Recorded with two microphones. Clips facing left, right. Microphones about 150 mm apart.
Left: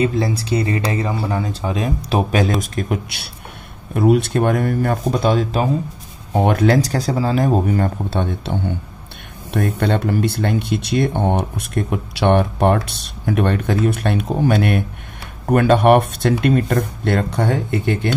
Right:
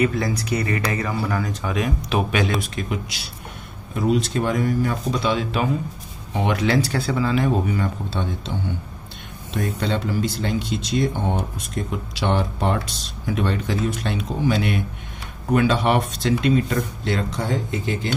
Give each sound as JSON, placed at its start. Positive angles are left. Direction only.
{"t": 0.0, "sound": "speech", "side_deg": 30}